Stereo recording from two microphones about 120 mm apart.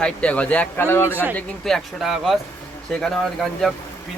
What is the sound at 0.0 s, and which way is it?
Speech, 10° left (ahead or behind).